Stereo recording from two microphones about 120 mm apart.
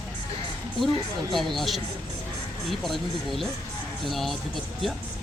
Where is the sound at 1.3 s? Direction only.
Centre (ahead or behind).